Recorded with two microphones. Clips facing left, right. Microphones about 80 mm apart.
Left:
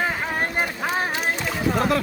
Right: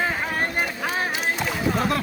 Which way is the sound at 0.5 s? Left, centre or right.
Centre.